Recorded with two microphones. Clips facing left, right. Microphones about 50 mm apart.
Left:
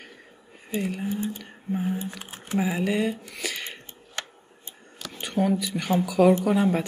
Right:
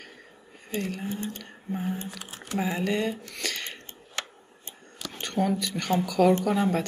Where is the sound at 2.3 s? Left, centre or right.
Left.